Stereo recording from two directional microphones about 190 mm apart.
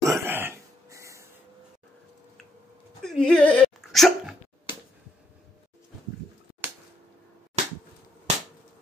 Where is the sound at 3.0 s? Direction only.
5° left (ahead or behind).